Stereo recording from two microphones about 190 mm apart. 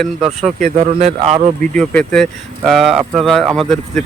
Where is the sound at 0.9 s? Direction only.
30° right (ahead or behind).